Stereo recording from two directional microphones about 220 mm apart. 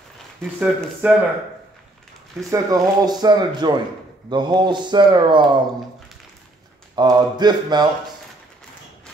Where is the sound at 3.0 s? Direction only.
20° right (ahead or behind).